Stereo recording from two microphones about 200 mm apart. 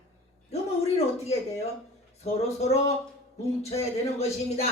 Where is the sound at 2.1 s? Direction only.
30° left (ahead or behind).